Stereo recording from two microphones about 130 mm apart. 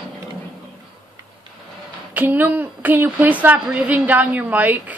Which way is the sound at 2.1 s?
15° right (ahead or behind).